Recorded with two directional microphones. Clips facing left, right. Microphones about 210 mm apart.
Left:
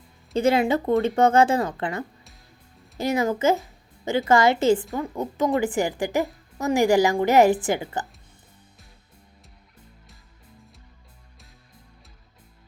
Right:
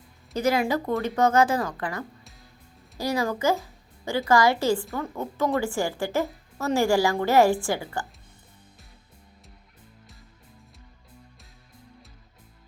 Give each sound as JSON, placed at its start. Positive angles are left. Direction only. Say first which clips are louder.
{"t": 0.3, "sound": "a woman's voice", "louder": "left 3 dB", "side_deg": 25}